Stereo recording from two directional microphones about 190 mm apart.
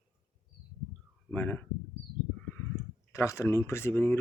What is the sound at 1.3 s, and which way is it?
Speech, 10° left (ahead or behind).